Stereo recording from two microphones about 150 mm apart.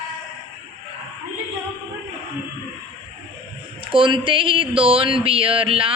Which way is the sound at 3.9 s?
35° right (ahead or behind).